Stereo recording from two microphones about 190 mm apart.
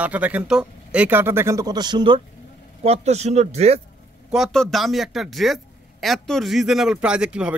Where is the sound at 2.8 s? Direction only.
35° right (ahead or behind).